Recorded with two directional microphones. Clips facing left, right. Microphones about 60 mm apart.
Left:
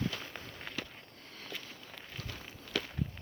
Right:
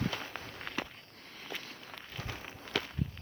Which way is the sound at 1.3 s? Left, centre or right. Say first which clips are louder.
Right 2 dB; centre.